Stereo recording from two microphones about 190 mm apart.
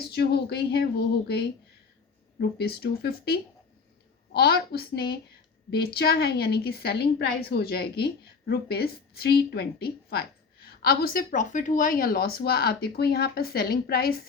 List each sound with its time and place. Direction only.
0.1 s a woman's voice: 60° left (ahead or behind)
2.4 s a woman's voice: 55° left (ahead or behind)